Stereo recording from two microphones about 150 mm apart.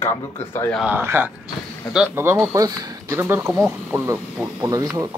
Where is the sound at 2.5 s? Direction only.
25° right (ahead or behind).